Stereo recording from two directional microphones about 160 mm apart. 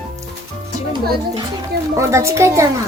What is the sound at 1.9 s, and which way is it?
Speech, 20° right (ahead or behind).